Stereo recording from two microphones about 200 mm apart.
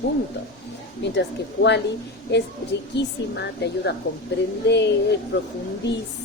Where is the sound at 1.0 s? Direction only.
60° left (ahead or behind).